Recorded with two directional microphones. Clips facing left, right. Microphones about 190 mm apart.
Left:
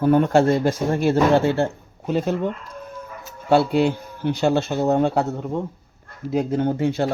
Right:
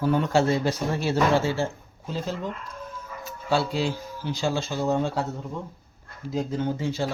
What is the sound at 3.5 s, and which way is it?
Speech, 60° left (ahead or behind).